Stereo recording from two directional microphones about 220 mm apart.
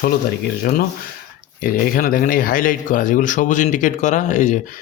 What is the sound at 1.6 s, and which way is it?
Speech, 40° left (ahead or behind).